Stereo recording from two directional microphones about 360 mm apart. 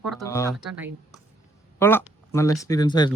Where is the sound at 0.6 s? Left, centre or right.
Centre.